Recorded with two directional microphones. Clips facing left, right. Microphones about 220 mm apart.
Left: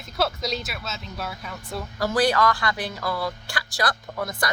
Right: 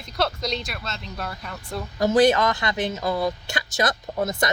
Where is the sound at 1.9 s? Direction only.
20° right (ahead or behind).